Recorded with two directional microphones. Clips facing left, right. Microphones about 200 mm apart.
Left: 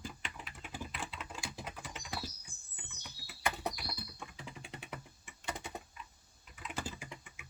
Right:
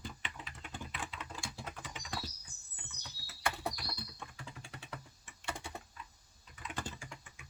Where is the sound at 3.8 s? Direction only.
5° left (ahead or behind).